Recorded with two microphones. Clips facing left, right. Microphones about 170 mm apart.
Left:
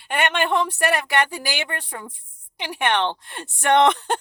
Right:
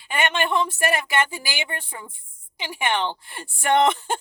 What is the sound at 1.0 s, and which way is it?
Speech, 65° left (ahead or behind).